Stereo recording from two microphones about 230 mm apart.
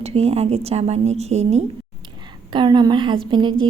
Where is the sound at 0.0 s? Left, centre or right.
Right.